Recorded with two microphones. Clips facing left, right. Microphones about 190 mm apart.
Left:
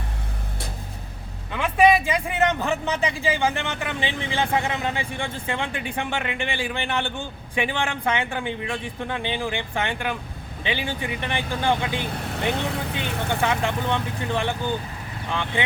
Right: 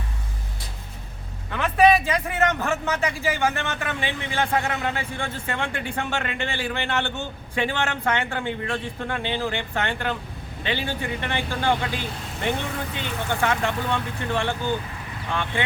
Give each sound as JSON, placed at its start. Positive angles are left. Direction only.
{"t": 1.5, "sound": "a man's voice", "side_deg": 15}